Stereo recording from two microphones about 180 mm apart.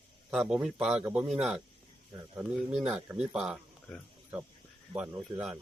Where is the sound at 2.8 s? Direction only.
5° right (ahead or behind).